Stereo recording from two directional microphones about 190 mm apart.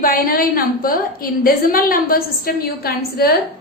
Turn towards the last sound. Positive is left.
turn(degrees=55)  # may be behind; listen again after turning